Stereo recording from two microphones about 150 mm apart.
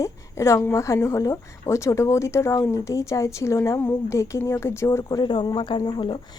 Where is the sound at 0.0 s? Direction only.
20° left (ahead or behind).